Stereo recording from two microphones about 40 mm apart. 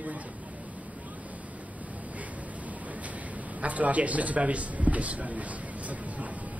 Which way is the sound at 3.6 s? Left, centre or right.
Right.